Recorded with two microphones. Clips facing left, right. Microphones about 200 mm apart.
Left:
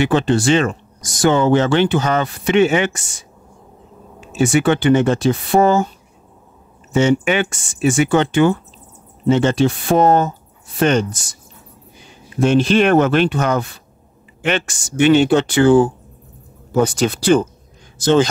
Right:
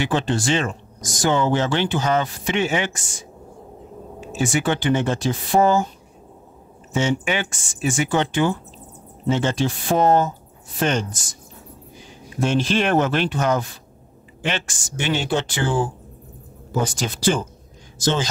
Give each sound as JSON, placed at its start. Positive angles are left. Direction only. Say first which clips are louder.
{"t": 0.0, "sound": "speech", "louder": "left 6 dB", "side_deg": 65}
{"t": 4.4, "sound": "speech", "louder": "left 7 dB", "side_deg": 65}
{"t": 6.9, "sound": "speech", "louder": "left 7 dB", "side_deg": 65}
{"t": 12.4, "sound": "speech", "louder": "left 7 dB", "side_deg": 65}